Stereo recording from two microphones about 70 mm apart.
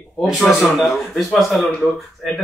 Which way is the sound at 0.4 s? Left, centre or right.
Centre.